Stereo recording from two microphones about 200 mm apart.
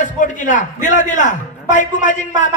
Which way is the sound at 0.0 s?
40° left (ahead or behind).